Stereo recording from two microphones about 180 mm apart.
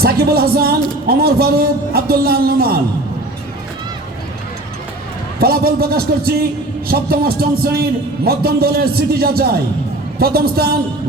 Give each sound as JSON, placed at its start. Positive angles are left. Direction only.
{"t": 0.0, "sound": "speech", "side_deg": -60}
{"t": 5.4, "sound": "speech", "side_deg": -55}